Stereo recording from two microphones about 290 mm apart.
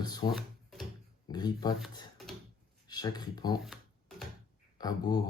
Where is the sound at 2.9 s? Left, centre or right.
Centre.